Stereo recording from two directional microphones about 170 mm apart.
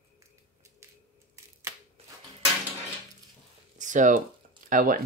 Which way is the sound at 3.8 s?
45° right (ahead or behind).